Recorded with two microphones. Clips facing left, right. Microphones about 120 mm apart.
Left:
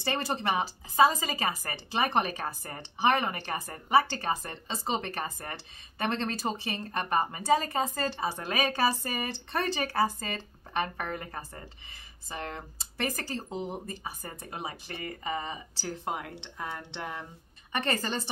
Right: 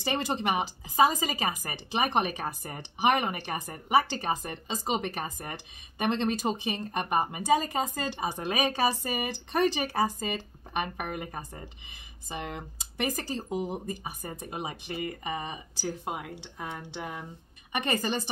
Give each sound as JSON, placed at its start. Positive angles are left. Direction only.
{"t": 0.0, "sound": "speech", "side_deg": -20}